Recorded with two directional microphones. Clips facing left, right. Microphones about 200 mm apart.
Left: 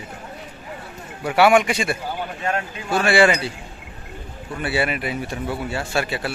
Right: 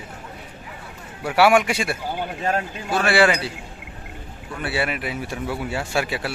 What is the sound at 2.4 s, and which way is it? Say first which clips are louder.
Speech: right 1 dB; 35° right (ahead or behind).